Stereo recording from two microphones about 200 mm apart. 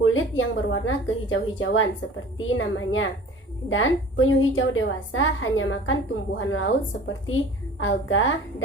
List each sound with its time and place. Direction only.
0.0 s a woman's voice: 80° left
7.8 s a woman's voice: 75° left (ahead or behind)